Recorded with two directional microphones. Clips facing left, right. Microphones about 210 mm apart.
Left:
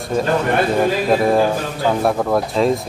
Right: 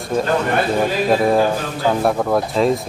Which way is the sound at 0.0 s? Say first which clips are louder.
Left 1 dB; centre (ahead or behind).